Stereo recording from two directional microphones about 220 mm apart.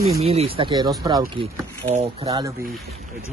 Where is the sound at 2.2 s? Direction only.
15° right (ahead or behind).